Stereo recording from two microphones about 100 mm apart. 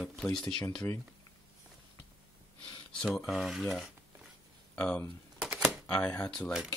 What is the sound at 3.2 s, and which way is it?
Speech, centre (ahead or behind).